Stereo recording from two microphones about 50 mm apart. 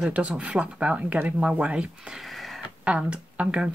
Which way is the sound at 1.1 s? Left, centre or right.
Right.